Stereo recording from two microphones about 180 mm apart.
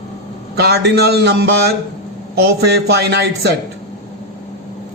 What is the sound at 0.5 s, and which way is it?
A man's voice, 65° right (ahead or behind).